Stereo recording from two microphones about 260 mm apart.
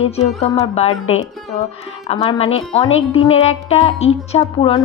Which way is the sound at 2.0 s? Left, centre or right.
Left.